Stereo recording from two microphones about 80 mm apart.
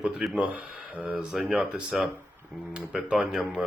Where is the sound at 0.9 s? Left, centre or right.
Centre.